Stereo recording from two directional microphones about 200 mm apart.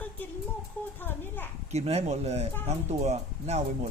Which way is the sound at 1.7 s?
30° right (ahead or behind).